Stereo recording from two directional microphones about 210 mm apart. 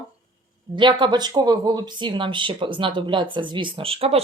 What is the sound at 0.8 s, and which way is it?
Speech, 20° right (ahead or behind).